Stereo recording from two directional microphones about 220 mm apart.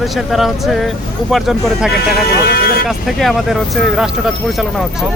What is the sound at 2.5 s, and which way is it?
Music, 45° left (ahead or behind).